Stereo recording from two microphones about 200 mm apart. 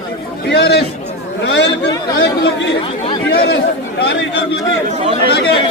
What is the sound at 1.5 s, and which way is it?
Speech, 60° left (ahead or behind).